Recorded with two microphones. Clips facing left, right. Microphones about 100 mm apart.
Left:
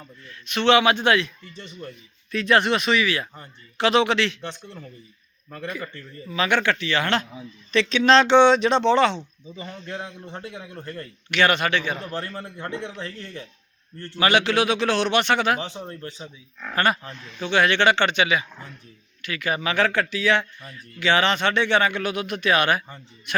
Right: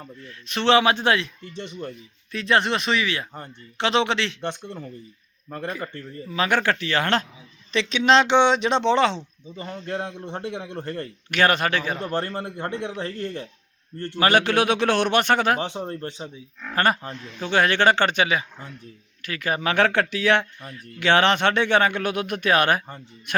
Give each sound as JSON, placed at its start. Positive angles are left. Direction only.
{"t": 0.0, "sound": "a man's voice", "side_deg": -30}
{"t": 2.3, "sound": "speech", "side_deg": -25}
{"t": 4.4, "sound": "speech", "side_deg": -55}
{"t": 5.5, "sound": "a man's voice", "side_deg": -35}
{"t": 7.7, "sound": "speech", "side_deg": -20}
{"t": 10.4, "sound": "a man's voice", "side_deg": -60}
{"t": 11.9, "sound": "a man's voice", "side_deg": -60}
{"t": 19.7, "sound": "speech", "side_deg": -60}